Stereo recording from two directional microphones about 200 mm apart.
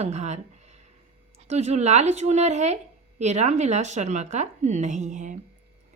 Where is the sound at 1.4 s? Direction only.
35° right (ahead or behind).